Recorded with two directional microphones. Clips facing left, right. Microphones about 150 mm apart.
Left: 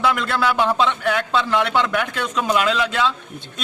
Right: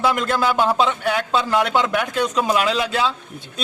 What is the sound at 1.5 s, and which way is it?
Speech, 40° right (ahead or behind).